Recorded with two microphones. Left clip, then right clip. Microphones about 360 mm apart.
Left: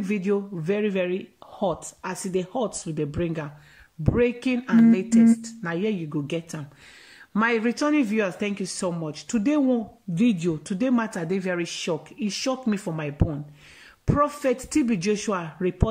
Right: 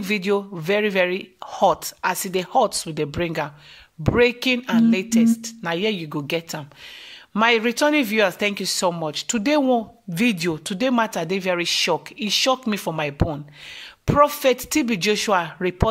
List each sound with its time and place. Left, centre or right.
0.0 s speech: centre
1.5 s speech: right
2.7 s speech: centre